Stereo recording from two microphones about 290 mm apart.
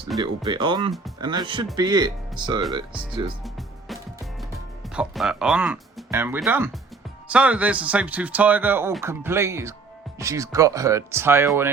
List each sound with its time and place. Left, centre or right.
0.2 s speech: centre
4.9 s speech: centre